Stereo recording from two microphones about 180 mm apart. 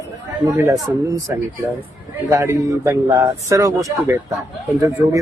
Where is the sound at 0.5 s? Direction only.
15° right (ahead or behind).